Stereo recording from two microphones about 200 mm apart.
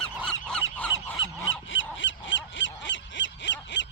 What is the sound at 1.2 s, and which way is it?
Goose, 75° left (ahead or behind).